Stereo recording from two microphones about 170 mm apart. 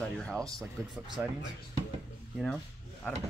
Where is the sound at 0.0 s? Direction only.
5° left (ahead or behind).